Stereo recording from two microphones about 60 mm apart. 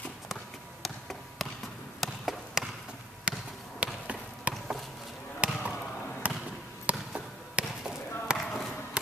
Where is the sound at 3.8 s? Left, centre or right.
Centre.